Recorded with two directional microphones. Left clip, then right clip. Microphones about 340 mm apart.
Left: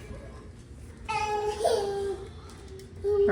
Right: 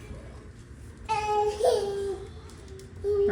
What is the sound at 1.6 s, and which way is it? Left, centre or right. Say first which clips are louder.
Babbling: right 2 dB; centre.